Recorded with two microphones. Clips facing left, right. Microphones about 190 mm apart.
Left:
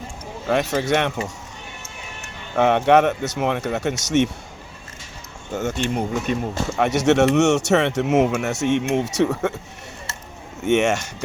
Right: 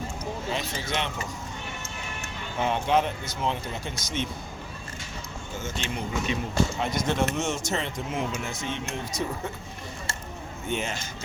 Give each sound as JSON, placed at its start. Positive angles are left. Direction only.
{"t": 0.4, "sound": "speech", "side_deg": 70}
{"t": 2.6, "sound": "speech", "side_deg": 70}
{"t": 5.5, "sound": "speech", "side_deg": 60}
{"t": 6.8, "sound": "speech", "side_deg": 75}
{"t": 10.7, "sound": "speech", "side_deg": 75}